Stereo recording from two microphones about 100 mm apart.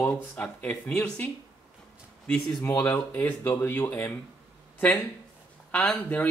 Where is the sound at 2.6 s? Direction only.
15° left (ahead or behind).